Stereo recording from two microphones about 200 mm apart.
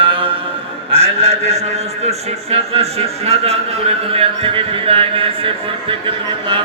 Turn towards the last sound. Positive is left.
turn(degrees=-25)  # may be behind; listen again after turning